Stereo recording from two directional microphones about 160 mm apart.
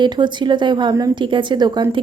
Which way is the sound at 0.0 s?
30° right (ahead or behind).